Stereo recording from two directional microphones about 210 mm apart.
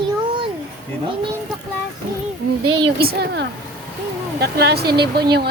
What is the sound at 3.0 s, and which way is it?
Speech, 50° right (ahead or behind).